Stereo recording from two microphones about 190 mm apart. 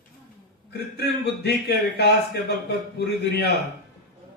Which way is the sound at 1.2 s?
60° left (ahead or behind).